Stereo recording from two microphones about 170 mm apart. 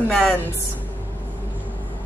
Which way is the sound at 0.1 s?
10° left (ahead or behind).